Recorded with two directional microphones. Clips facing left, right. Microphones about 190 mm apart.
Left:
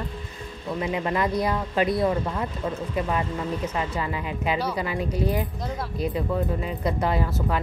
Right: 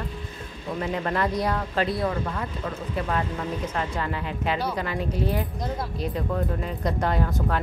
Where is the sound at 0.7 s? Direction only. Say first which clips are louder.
Left 1 dB; 10° left (ahead or behind).